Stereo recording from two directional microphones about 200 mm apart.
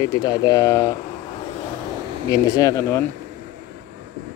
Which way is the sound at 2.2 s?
20° left (ahead or behind).